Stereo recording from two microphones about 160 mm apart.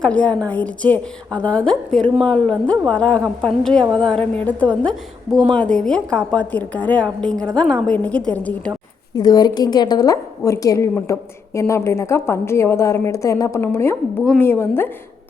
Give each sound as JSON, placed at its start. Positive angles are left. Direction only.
{"t": 0.0, "sound": "a woman's voice", "side_deg": 10}
{"t": 9.1, "sound": "a woman's voice", "side_deg": 25}